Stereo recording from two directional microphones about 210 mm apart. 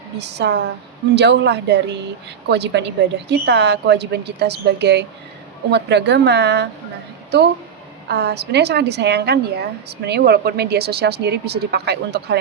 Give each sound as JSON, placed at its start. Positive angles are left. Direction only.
{"t": 0.2, "sound": "a woman's voice", "side_deg": -55}
{"t": 8.0, "sound": "a woman's voice", "side_deg": -55}